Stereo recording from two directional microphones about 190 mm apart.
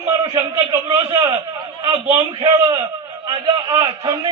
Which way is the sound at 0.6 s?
15° right (ahead or behind).